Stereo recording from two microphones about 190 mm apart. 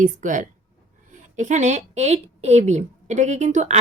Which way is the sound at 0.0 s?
45° right (ahead or behind).